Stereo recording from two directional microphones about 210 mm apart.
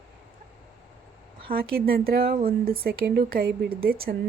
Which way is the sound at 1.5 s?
45° right (ahead or behind).